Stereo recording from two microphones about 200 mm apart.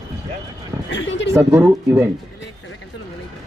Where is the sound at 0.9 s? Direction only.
65° left (ahead or behind).